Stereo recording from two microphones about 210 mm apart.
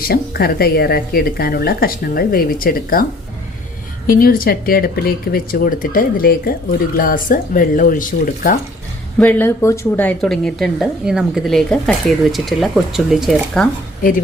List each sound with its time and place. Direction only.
0.0 s speech: 45° left (ahead or behind)
4.0 s speech: 45° left (ahead or behind)
9.1 s speech: 10° left (ahead or behind)